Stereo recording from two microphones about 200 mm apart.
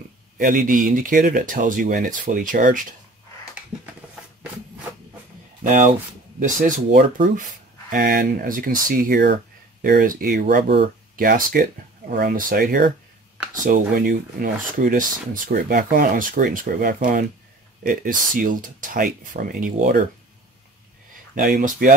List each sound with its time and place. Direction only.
0.4 s speech: 40° right (ahead or behind)
5.6 s speech: 40° right (ahead or behind)
21.4 s speech: 40° right (ahead or behind)